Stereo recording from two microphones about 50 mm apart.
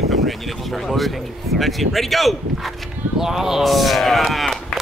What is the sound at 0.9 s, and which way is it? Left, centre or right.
Speech, centre.